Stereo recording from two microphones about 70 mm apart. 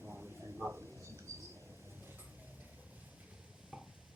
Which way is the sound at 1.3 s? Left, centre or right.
Right.